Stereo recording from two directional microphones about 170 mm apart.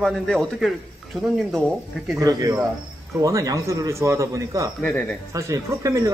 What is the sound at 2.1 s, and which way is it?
Speech, 20° right (ahead or behind).